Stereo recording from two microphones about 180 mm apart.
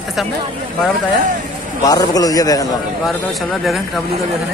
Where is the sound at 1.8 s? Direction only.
20° left (ahead or behind).